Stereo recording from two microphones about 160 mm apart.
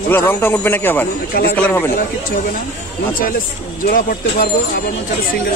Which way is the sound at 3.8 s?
65° left (ahead or behind).